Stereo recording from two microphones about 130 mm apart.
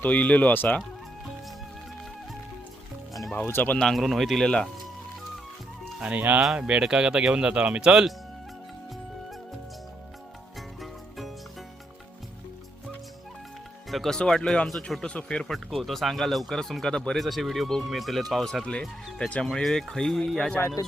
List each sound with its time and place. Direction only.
0.0 s speech: 10° left (ahead or behind)
3.3 s speech: 15° left (ahead or behind)
6.0 s speech: 10° right (ahead or behind)
13.9 s speech: 5° left (ahead or behind)
20.6 s speech: 20° left (ahead or behind)